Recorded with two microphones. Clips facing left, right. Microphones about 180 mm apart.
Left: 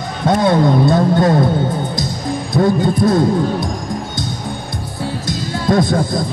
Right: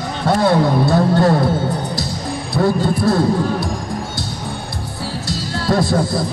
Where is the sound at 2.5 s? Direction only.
20° left (ahead or behind).